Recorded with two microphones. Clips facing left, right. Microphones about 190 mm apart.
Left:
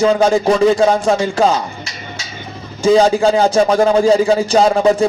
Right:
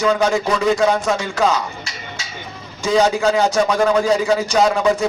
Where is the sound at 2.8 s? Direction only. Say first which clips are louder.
Left 5 dB; 30° left (ahead or behind).